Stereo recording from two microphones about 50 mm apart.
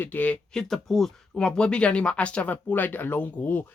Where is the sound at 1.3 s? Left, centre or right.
Centre; by 3.6 s left.